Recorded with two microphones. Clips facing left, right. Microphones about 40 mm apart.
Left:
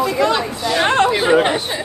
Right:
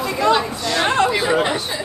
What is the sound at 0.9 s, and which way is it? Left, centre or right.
Speech, left.